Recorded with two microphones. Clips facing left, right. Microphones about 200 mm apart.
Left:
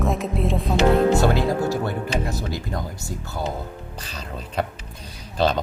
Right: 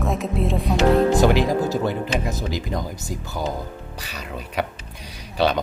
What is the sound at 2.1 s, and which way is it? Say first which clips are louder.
Speech: right 1 dB; 20° right (ahead or behind).